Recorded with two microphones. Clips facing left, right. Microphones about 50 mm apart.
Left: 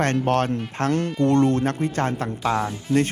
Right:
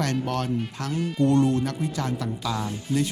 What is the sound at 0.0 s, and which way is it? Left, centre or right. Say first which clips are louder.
Speech: left 6 dB; left.